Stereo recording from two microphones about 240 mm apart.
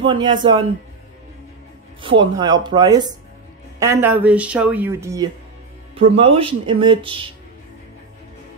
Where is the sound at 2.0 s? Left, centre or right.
Centre.